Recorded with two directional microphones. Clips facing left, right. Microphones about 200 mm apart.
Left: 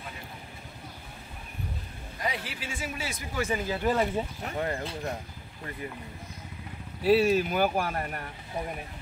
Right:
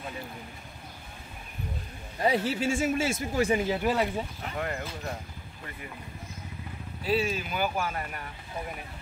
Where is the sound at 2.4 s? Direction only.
45° right (ahead or behind).